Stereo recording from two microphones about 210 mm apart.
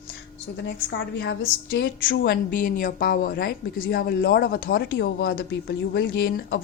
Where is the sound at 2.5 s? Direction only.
40° left (ahead or behind).